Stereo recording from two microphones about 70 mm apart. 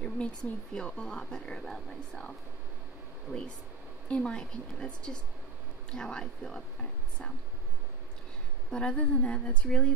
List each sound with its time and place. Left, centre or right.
0.4 s speech: centre
3.3 s speech: right
4.1 s speech: centre
8.6 s speech: centre